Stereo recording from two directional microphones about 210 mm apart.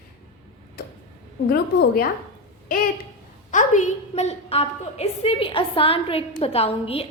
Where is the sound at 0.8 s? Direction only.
50° left (ahead or behind).